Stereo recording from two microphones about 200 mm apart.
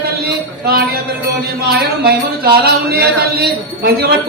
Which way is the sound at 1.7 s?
50° right (ahead or behind).